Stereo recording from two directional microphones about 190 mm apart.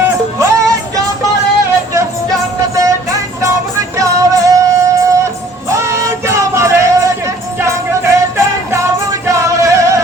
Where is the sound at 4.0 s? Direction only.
15° right (ahead or behind).